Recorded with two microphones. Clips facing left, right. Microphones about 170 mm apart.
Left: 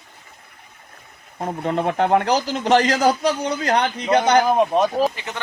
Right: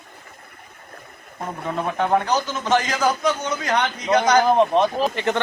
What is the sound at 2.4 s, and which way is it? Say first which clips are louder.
A man's voice: left 4 dB; 35° left (ahead or behind).